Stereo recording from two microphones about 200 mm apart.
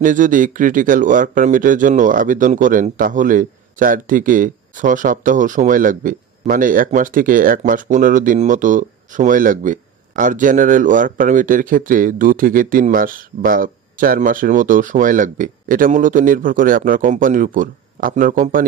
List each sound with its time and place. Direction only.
0.0 s speech: 40° right (ahead or behind)